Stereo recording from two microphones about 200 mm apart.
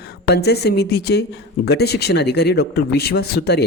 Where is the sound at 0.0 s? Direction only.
55° left (ahead or behind).